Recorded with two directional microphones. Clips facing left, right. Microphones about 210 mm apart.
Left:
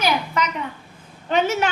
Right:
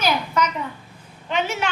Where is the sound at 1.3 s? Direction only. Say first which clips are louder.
Left 4 dB; 40° left (ahead or behind).